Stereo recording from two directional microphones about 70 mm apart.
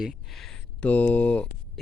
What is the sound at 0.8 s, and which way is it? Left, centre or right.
Speech, left.